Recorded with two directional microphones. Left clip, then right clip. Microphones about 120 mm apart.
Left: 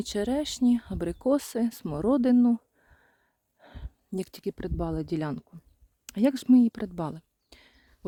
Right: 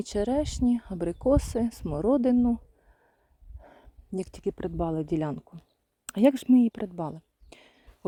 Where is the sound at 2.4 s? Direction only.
40° left (ahead or behind).